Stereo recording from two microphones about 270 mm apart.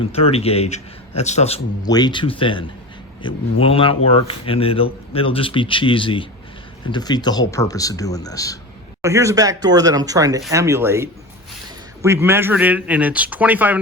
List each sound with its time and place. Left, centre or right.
0.0 s speech: left
9.0 s speech: centre